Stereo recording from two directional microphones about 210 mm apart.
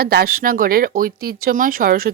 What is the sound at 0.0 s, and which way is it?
Speech, 45° right (ahead or behind).